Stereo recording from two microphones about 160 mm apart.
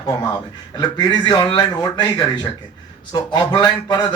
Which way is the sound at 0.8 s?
25° left (ahead or behind).